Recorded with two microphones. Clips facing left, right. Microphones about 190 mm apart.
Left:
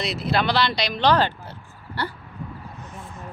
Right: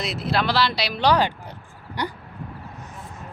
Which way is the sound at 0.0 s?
Centre (ahead or behind).